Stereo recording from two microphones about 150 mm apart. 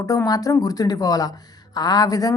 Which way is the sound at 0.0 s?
20° left (ahead or behind).